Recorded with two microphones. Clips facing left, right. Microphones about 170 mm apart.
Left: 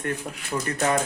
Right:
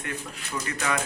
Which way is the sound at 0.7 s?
40° left (ahead or behind).